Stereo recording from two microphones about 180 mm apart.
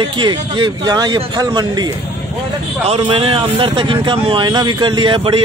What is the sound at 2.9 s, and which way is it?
Speech, 30° right (ahead or behind).